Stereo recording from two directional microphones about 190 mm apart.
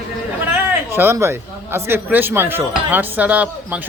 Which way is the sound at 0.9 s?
10° right (ahead or behind).